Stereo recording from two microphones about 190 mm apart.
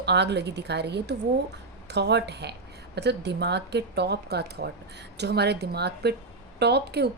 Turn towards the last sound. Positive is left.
turn(degrees=-60)  # may be behind; listen again after turning